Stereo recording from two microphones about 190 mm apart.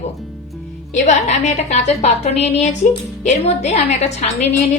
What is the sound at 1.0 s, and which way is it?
A woman's voice, 35° left (ahead or behind).